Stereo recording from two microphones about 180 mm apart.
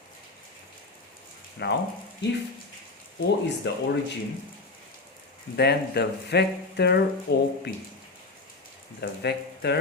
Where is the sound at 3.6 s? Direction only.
80° left.